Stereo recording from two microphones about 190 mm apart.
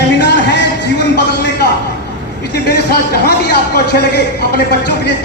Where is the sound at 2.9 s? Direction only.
60° left (ahead or behind).